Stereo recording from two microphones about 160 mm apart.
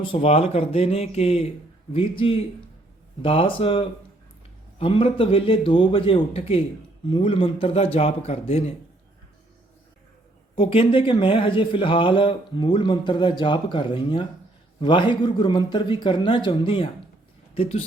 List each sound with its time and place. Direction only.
0.1 s speech: 40° left (ahead or behind)
10.5 s a man's voice: 35° left (ahead or behind)